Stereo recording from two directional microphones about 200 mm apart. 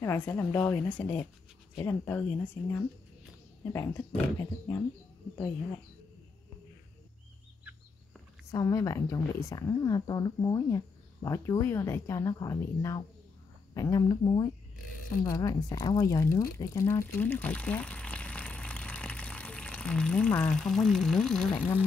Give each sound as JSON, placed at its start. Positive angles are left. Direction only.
{"t": 0.0, "sound": "speech", "side_deg": 10}
{"t": 3.7, "sound": "speech", "side_deg": 15}
{"t": 8.5, "sound": "speech", "side_deg": 15}